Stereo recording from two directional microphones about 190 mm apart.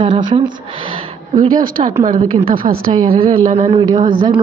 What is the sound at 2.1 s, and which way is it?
Speech, 30° right (ahead or behind).